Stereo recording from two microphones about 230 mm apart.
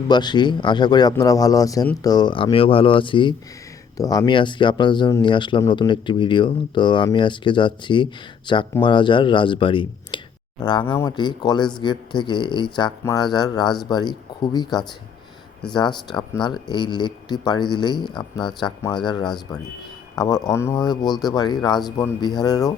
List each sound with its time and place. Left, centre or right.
0.1 s speech: centre
20.1 s speech: centre